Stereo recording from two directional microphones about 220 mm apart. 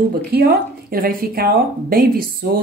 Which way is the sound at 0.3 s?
45° right (ahead or behind).